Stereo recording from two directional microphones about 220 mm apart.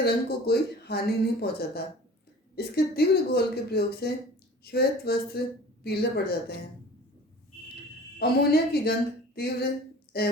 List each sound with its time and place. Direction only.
0.0 s speech: 45° left (ahead or behind)
8.2 s speech: 45° left (ahead or behind)